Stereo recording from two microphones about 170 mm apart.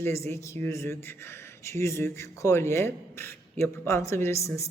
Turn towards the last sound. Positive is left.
turn(degrees=15)  # may be behind; listen again after turning